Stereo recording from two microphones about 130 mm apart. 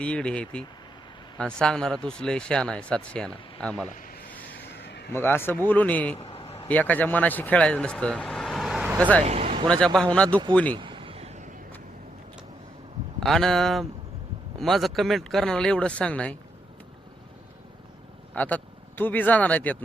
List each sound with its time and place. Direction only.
0.0 s speech: 10° left (ahead or behind)
3.8 s speech: 90° left
5.1 s speech: 15° left (ahead or behind)
6.1 s vehicle: 50° left (ahead or behind)
6.7 s speech: 10° left (ahead or behind)
9.0 s speech: 10° left (ahead or behind)
9.2 s a sound: 55° right (ahead or behind)
9.6 s speech: 5° left (ahead or behind)
10.8 s vehicle: 40° right (ahead or behind); by 11.5 s 60° right (ahead or behind)
13.1 s speech: centre (ahead or behind)
18.3 s a man's voice: 10° left (ahead or behind)